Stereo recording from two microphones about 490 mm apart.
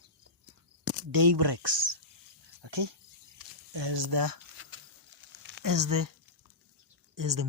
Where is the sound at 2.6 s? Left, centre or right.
Right.